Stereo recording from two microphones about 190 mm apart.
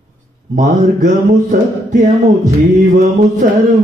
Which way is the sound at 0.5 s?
40° right (ahead or behind).